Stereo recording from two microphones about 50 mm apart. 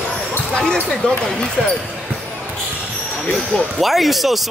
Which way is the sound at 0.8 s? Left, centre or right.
Centre.